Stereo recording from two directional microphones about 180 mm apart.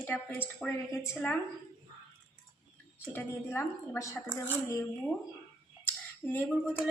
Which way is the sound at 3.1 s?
10° left (ahead or behind).